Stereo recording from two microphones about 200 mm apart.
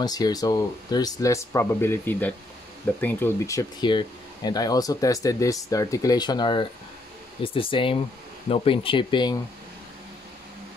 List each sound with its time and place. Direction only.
0.0 s speech: 20° left (ahead or behind)